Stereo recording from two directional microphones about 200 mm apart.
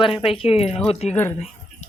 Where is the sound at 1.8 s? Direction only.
35° left (ahead or behind).